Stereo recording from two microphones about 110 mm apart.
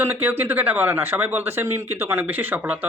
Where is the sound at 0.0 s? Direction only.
15° right (ahead or behind).